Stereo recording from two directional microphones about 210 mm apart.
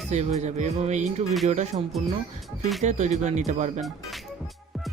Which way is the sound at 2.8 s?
35° right (ahead or behind).